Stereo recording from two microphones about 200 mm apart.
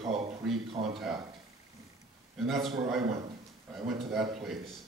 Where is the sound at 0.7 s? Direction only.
30° right (ahead or behind).